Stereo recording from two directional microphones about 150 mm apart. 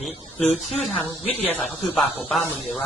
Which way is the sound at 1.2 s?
40° left (ahead or behind).